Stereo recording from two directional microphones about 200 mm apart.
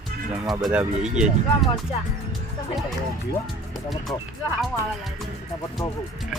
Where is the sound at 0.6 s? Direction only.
5° right (ahead or behind).